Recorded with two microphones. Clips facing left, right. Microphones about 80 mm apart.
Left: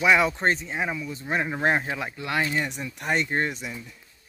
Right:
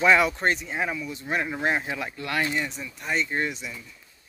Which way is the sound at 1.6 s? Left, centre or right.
Left.